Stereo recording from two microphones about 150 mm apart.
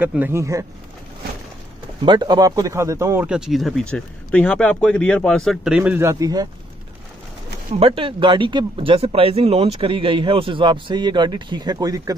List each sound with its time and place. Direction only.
0.0 s speech: 10° right (ahead or behind)
2.0 s speech: 30° right (ahead or behind)
3.3 s speech: 5° right (ahead or behind); by 6.5 s 25° right (ahead or behind)
7.7 s speech: 40° right (ahead or behind)